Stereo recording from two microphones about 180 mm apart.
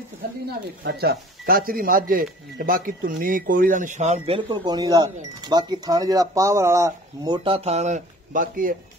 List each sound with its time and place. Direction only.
0.5 s speech: 65° right (ahead or behind)